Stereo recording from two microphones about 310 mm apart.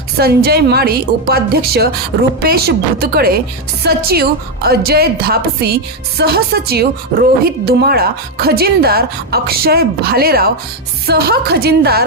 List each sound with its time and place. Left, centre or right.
0.2 s a woman's voice: right